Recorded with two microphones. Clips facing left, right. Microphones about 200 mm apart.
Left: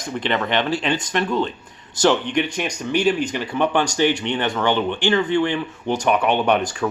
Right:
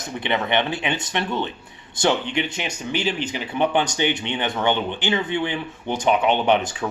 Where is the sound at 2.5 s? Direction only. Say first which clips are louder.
Left 4 dB; 5° right (ahead or behind).